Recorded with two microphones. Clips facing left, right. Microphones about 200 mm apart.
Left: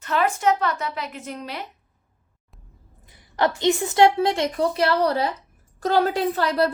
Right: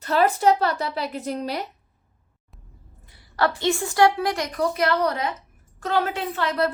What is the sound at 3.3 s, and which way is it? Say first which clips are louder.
A woman's voice: left 2 dB; 20° left (ahead or behind).